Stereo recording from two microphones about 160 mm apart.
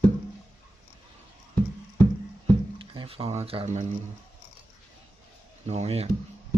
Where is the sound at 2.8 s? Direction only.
35° right (ahead or behind).